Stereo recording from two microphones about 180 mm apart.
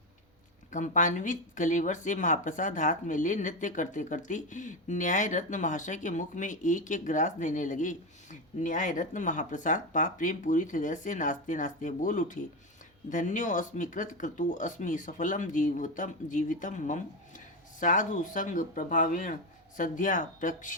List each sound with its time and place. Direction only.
0.7 s speech: 45° left (ahead or behind)